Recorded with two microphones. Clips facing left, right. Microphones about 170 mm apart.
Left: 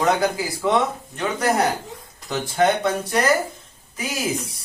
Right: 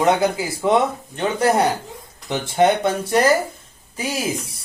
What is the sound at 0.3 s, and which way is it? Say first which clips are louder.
Speech: right 3 dB; 25° right (ahead or behind).